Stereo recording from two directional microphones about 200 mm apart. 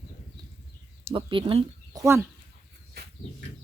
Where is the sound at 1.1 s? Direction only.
25° right (ahead or behind).